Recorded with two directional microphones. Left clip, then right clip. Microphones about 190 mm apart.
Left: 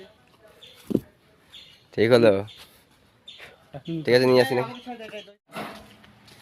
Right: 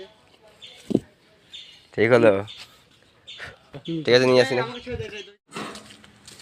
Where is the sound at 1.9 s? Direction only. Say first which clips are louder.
Right 1 dB; 30° left (ahead or behind).